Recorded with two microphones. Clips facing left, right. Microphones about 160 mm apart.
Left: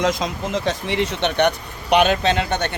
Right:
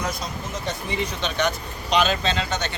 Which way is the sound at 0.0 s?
90° left.